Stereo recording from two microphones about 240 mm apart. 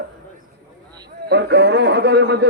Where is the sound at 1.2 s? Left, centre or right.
Right.